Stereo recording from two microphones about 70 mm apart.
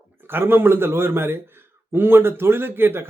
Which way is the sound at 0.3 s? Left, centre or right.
Right.